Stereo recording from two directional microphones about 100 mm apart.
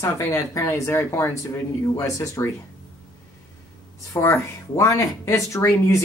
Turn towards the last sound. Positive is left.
turn(degrees=30)  # may be behind; listen again after turning